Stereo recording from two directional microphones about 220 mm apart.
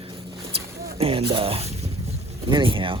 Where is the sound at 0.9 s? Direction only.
25° right (ahead or behind).